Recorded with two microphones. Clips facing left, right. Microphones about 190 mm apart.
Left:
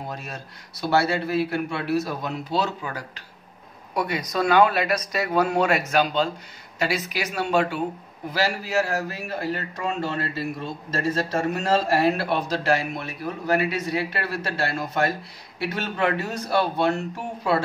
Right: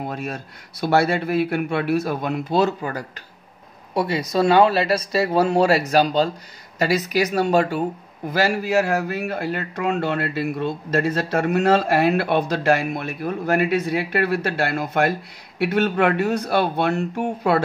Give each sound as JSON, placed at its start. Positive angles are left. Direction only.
{"t": 0.1, "sound": "a man's voice", "side_deg": -55}
{"t": 3.9, "sound": "speech", "side_deg": -30}
{"t": 8.3, "sound": "a man's voice", "side_deg": -50}